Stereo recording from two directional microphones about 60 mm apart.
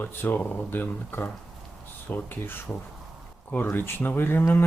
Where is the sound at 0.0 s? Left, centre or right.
Left.